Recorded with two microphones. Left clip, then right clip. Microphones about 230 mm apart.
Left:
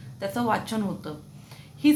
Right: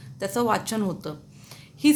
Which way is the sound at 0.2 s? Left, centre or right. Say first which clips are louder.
Right 2 dB; right.